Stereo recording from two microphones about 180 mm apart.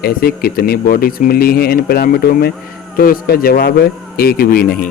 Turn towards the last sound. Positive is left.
turn(degrees=55)  # may be behind; listen again after turning